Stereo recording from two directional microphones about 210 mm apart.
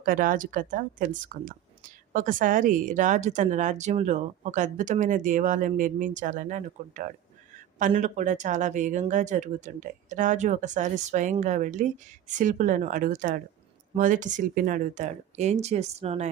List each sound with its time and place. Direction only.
0.0 s a woman's voice: 40° right (ahead or behind)